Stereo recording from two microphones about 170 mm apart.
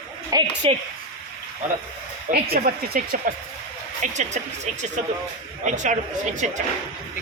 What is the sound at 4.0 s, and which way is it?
Speech, 45° right (ahead or behind).